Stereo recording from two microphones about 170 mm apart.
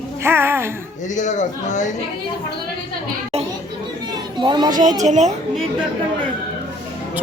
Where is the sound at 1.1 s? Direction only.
45° left (ahead or behind).